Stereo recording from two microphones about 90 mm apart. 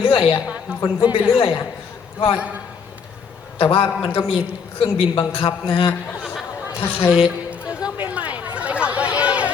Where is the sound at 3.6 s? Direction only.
90° left; by 5.9 s 70° left (ahead or behind).